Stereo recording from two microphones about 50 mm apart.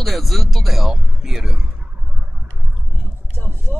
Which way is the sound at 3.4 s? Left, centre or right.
Left.